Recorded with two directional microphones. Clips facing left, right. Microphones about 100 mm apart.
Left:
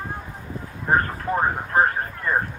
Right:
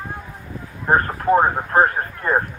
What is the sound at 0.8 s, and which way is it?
Speech, 40° right (ahead or behind).